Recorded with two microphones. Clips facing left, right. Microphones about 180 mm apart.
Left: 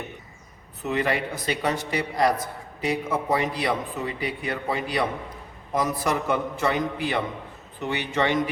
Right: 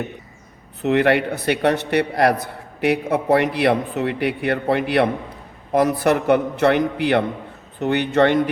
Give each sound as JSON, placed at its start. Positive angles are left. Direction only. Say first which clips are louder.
{"t": 0.8, "sound": "a man's voice", "louder": "right 8 dB", "side_deg": -65}